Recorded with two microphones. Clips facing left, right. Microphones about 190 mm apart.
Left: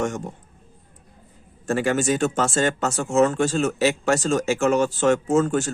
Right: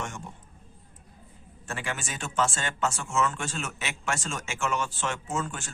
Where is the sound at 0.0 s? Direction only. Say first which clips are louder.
Left 12 dB; 45° left (ahead or behind).